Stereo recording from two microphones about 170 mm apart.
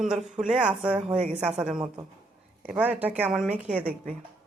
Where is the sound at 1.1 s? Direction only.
40° right (ahead or behind).